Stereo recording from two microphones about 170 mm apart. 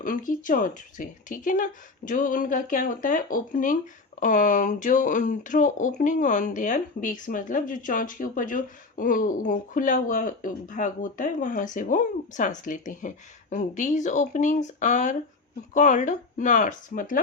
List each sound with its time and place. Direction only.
0.0 s speech: 50° left (ahead or behind)